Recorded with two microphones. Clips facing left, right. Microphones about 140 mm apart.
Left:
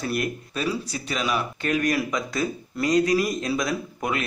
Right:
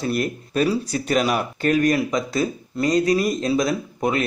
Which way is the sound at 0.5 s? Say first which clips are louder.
Right 9 dB; 40° right (ahead or behind).